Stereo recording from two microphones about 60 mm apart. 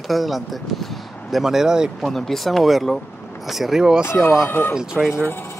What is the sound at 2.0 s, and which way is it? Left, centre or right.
Speech, centre.